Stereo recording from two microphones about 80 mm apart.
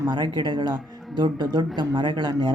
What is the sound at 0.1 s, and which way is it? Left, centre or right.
Speech, right.